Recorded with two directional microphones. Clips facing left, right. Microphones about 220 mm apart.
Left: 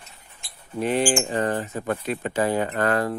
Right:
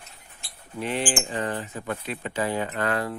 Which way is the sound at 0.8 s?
45° left (ahead or behind).